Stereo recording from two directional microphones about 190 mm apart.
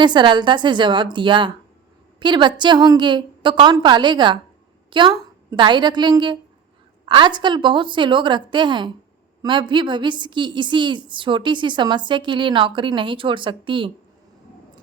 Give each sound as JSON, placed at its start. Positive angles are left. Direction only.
{"t": 0.0, "sound": "a woman's voice", "side_deg": -25}